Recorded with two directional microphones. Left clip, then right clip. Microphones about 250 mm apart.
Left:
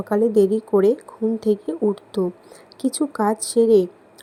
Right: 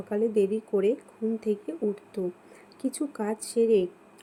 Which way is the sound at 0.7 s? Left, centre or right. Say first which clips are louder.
Left 9 dB; centre.